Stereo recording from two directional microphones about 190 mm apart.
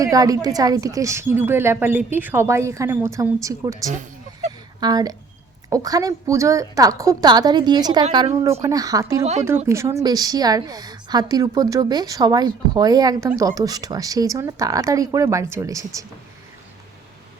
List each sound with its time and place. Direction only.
0.0 s a woman's voice: 20° right (ahead or behind)